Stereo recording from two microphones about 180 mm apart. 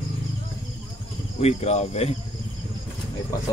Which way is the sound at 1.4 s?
35° left (ahead or behind).